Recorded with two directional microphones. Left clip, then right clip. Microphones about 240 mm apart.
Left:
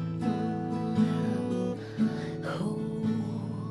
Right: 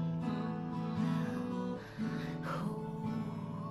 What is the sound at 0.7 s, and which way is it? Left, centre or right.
Music, left.